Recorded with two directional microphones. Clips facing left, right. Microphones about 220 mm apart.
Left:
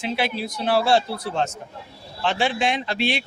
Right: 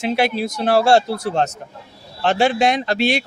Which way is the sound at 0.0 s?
45° right (ahead or behind).